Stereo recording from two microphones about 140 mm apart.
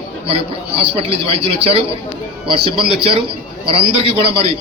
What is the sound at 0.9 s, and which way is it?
A man's voice, 45° right (ahead or behind).